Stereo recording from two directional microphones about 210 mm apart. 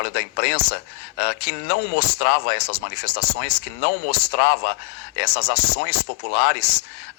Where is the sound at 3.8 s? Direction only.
50° left (ahead or behind).